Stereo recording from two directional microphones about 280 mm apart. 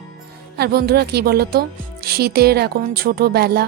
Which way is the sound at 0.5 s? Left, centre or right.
Right.